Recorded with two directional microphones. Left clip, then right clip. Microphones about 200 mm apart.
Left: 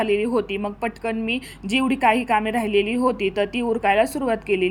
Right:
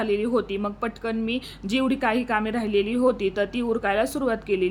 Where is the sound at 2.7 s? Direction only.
40° right (ahead or behind).